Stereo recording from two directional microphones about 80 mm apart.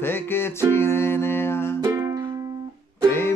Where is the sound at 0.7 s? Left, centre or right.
Left.